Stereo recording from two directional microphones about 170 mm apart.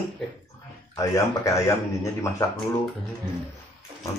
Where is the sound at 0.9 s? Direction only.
20° left (ahead or behind).